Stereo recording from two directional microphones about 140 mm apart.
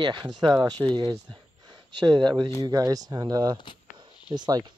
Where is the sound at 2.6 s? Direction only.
25° right (ahead or behind).